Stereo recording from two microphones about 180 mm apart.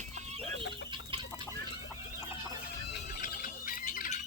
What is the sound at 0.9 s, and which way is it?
Chicken, 30° right (ahead or behind).